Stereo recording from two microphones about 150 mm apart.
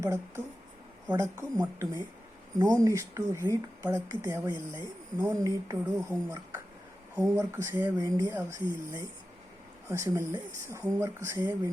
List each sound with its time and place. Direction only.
0.0 s speech: 20° right (ahead or behind)